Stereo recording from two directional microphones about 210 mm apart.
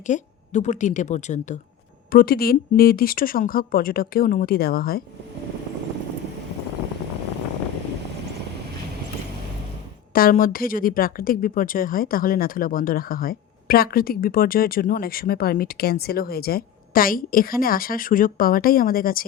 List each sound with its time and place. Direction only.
0.1 s a woman's voice: 35° left (ahead or behind)
2.1 s a woman's voice: 45° left (ahead or behind)
10.2 s a woman's voice: 40° left (ahead or behind)